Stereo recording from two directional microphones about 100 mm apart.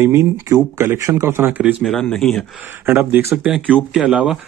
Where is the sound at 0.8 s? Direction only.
25° right (ahead or behind).